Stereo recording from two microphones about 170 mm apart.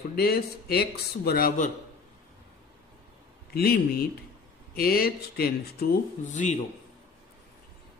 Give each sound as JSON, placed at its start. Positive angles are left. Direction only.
{"t": 0.1, "sound": "speech", "side_deg": 65}
{"t": 3.5, "sound": "speech", "side_deg": 65}
{"t": 6.3, "sound": "a man's voice", "side_deg": 45}